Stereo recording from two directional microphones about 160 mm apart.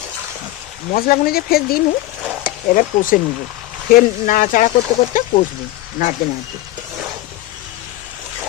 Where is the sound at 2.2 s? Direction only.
10° right (ahead or behind).